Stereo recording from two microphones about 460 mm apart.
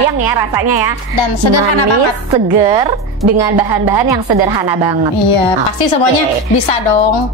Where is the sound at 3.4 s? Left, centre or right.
Right.